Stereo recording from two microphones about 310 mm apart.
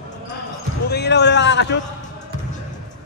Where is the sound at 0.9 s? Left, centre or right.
Left.